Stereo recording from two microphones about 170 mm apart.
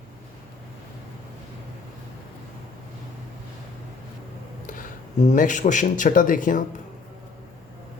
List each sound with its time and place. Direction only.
5.2 s speech: 45° left (ahead or behind)